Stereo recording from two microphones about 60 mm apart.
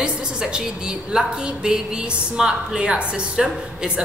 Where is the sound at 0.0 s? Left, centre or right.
Centre.